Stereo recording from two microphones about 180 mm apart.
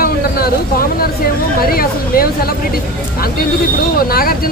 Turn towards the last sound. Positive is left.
turn(degrees=55)  # may be behind; listen again after turning